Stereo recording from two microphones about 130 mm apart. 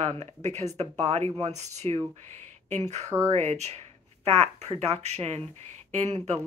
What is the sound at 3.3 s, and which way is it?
Speech, 55° right (ahead or behind).